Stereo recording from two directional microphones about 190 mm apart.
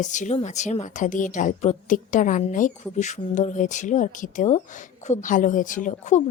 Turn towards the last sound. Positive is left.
turn(degrees=40)  # may be behind; listen again after turning